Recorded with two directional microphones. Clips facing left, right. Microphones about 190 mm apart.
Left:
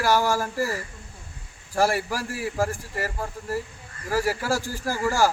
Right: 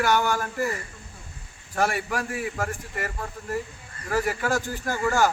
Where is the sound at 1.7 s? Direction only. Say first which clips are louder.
Left 2 dB; 30° left (ahead or behind).